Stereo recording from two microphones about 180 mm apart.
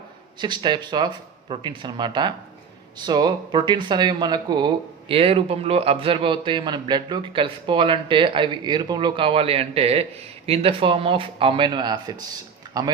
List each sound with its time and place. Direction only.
0.3 s speech: 25° right (ahead or behind)